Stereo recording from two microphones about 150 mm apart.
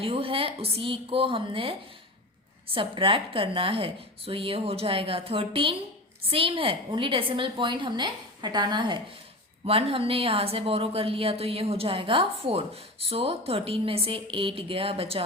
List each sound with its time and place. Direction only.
0.0 s a woman's voice: 35° right (ahead or behind)
9.6 s a woman's voice: 40° right (ahead or behind)